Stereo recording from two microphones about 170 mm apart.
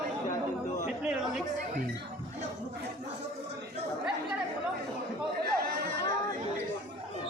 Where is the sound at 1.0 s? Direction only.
5° right (ahead or behind).